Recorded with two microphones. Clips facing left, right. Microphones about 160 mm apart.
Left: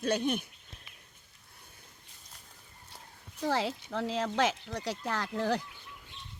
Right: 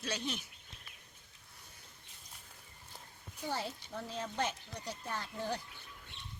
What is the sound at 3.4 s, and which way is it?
Speech, 90° left.